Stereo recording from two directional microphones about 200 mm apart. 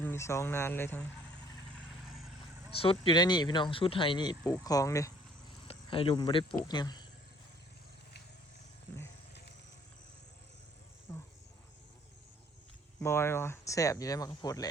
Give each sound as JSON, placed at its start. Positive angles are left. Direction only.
{"t": 0.0, "sound": "speech", "side_deg": 10}
{"t": 1.7, "sound": "vehicle", "side_deg": 0}
{"t": 2.7, "sound": "speech", "side_deg": 25}
{"t": 5.6, "sound": "speech", "side_deg": 25}
{"t": 11.1, "sound": "insect", "side_deg": 10}
{"t": 13.0, "sound": "speech", "side_deg": 10}